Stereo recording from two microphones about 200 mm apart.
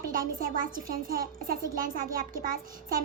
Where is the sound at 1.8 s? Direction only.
45° right (ahead or behind).